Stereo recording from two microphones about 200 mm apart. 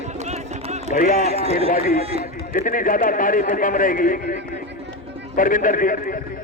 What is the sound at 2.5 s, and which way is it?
A man's voice, 45° left (ahead or behind).